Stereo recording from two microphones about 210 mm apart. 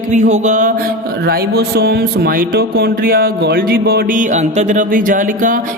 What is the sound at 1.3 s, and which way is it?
Speech, 50° right (ahead or behind).